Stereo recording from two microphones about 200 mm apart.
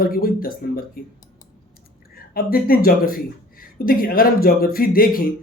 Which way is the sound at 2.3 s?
50° left (ahead or behind).